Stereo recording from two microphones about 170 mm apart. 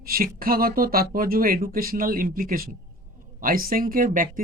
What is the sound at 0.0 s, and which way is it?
Speech, 60° right (ahead or behind).